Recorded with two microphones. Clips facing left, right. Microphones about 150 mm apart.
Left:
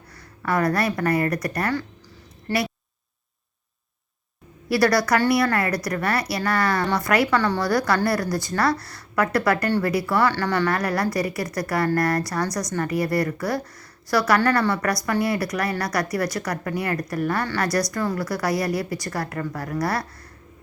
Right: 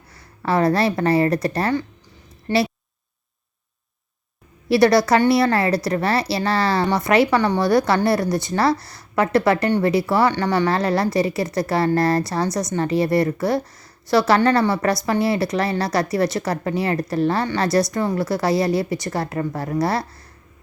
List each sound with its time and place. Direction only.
0.2 s speech: 25° right (ahead or behind)
4.7 s speech: 25° right (ahead or behind)